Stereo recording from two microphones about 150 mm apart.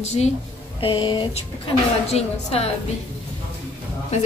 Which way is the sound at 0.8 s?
35° left (ahead or behind).